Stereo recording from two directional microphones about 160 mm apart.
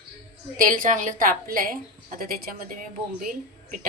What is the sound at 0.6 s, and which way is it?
A woman's voice, 55° right (ahead or behind).